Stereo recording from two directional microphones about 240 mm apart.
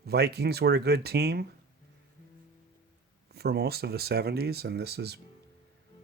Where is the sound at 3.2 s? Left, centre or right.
Right.